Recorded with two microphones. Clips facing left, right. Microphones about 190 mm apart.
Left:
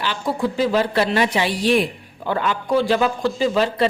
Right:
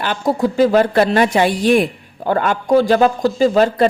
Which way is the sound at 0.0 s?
50° right (ahead or behind).